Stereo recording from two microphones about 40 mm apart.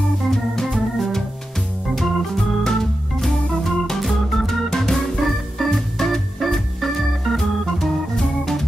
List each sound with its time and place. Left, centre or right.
0.3 s organ: centre
4.6 s organ: centre
5.2 s organ: centre
5.7 s organ: centre
6.4 s organ: centre